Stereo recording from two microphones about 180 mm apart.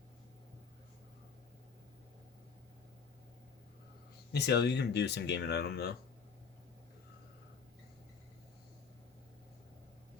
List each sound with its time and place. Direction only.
4.3 s speech: 65° left (ahead or behind)